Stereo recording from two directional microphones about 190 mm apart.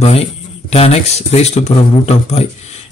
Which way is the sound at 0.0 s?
35° left (ahead or behind).